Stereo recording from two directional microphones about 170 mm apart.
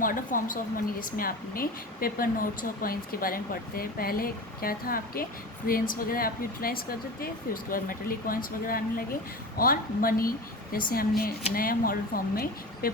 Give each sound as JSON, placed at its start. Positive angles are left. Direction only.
{"t": 0.0, "sound": "speech", "side_deg": 55}